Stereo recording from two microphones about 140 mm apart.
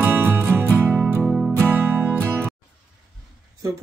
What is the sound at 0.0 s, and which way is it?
Music, 15° right (ahead or behind).